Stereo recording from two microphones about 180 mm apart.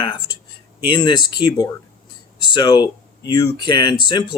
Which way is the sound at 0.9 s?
25° left (ahead or behind).